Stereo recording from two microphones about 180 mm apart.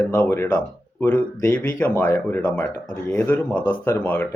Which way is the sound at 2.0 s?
10° left (ahead or behind).